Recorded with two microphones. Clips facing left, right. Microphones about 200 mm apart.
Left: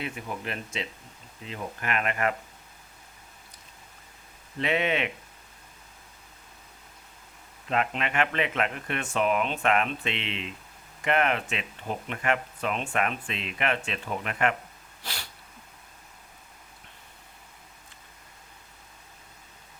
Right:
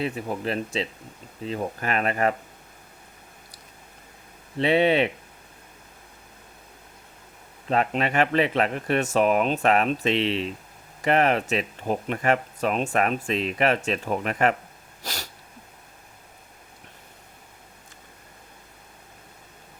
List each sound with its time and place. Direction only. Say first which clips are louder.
0.0 s speech: right 7 dB; 30° right (ahead or behind)
4.5 s speech: right 7 dB; 30° right (ahead or behind)
7.7 s speech: right 5 dB; 35° right (ahead or behind)
15.0 s sneeze: right 5 dB; 40° right (ahead or behind)